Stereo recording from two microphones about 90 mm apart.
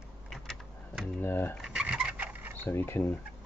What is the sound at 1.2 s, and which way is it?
Speech, 25° left (ahead or behind).